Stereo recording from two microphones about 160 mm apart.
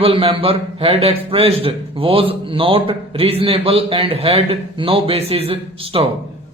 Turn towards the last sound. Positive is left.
turn(degrees=-35)  # may be behind; listen again after turning